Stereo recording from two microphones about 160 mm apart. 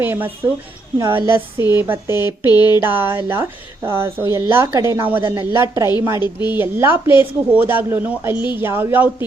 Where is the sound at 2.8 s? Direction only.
15° right (ahead or behind).